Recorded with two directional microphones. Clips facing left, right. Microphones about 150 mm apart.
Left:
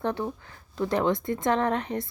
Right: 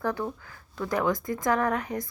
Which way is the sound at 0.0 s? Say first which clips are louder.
Left 1 dB; 25° left (ahead or behind).